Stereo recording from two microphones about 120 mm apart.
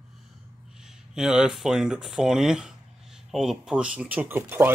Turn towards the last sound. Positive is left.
turn(degrees=-15)  # may be behind; listen again after turning